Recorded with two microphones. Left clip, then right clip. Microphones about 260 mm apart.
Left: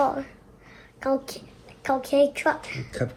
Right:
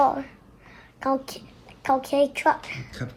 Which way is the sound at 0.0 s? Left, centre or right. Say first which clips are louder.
Right 3 dB; right.